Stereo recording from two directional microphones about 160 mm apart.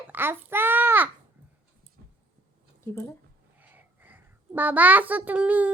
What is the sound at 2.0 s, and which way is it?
Dog, 65° right (ahead or behind).